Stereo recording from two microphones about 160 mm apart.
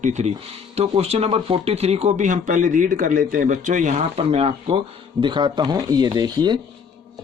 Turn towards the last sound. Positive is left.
turn(degrees=-25)  # may be behind; listen again after turning